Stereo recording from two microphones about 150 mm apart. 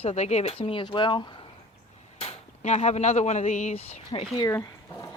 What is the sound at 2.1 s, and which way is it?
Speech, 45° left (ahead or behind).